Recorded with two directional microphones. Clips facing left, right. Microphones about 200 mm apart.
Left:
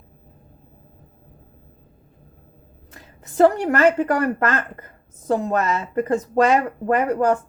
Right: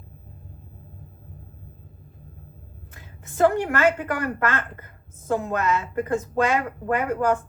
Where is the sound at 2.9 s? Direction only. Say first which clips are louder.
Left 13 dB; 35° left (ahead or behind).